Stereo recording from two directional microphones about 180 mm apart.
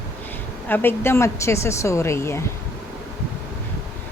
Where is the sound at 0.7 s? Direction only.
10° left (ahead or behind).